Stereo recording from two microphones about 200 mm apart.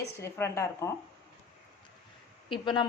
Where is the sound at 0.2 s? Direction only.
15° left (ahead or behind).